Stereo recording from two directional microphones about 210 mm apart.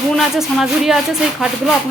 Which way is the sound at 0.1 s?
Centre (ahead or behind).